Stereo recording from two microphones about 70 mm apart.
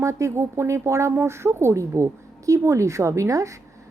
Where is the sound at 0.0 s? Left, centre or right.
Right.